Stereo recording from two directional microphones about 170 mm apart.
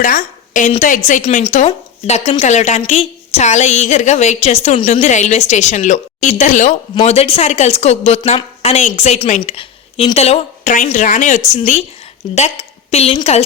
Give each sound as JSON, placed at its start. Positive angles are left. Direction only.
{"t": 0.0, "sound": "a woman's voice", "side_deg": 50}
{"t": 9.4, "sound": "a sound", "side_deg": 35}
{"t": 10.2, "sound": "a woman's voice", "side_deg": 40}